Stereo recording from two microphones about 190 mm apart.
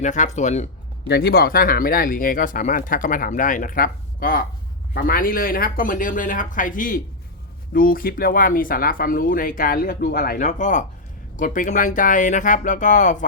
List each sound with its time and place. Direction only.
0.0 s speech: 40° left (ahead or behind)
1.0 s speech: 55° left (ahead or behind); by 13.2 s 40° left (ahead or behind)